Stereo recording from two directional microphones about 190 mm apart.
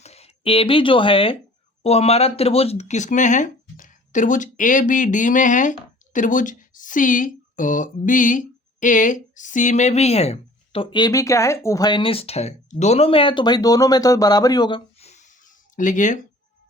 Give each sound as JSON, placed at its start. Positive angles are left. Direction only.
{"t": 0.0, "sound": "a woman's voice", "side_deg": 35}